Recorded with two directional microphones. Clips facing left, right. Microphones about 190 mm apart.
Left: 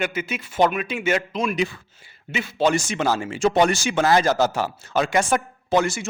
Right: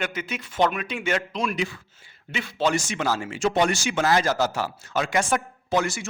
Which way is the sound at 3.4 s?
35° left (ahead or behind).